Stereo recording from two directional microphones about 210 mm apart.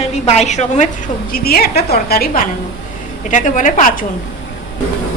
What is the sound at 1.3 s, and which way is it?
A woman's voice, 45° left (ahead or behind).